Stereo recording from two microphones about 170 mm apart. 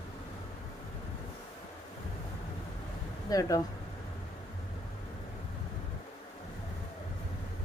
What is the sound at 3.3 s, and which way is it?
Speech, 20° left (ahead or behind).